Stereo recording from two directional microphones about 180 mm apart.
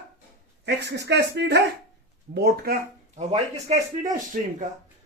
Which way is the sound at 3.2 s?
40° right (ahead or behind).